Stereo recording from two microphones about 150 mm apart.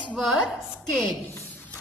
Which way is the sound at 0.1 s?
Centre (ahead or behind).